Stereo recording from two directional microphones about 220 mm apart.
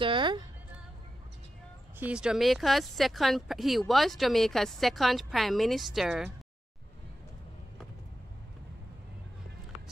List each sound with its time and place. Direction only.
0.0 s music: 20° right (ahead or behind)
2.0 s a woman's voice: 5° right (ahead or behind)